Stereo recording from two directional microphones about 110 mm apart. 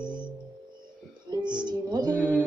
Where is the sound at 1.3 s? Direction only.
40° right (ahead or behind).